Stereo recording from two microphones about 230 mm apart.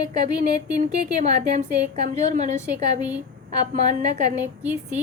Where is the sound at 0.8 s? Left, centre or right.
Right.